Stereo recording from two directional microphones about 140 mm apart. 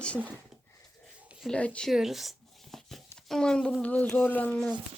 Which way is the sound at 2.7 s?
Centre (ahead or behind).